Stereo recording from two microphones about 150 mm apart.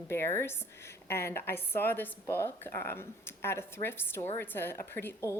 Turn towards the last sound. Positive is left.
turn(degrees=15)  # may be behind; listen again after turning